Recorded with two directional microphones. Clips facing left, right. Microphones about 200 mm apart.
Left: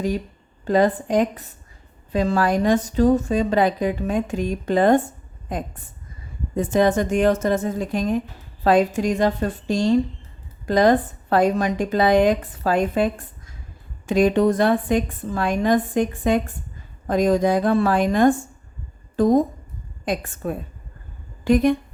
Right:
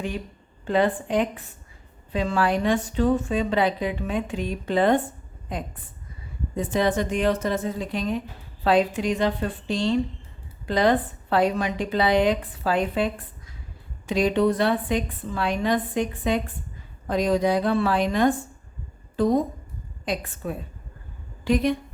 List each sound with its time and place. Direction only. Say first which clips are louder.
0.6 s a woman's voice: left 4 dB; 40° left (ahead or behind)
14.1 s a woman's voice: left 4 dB; 45° left (ahead or behind)